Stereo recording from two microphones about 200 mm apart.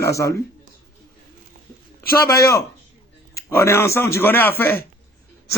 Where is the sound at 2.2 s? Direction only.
15° left (ahead or behind).